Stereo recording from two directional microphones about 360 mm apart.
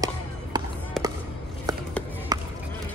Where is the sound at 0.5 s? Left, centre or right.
Centre.